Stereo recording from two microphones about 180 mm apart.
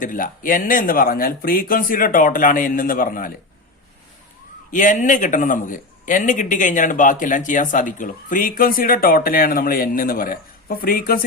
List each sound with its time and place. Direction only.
0.0 s speech: 50° left (ahead or behind)
4.7 s speech: 45° left (ahead or behind)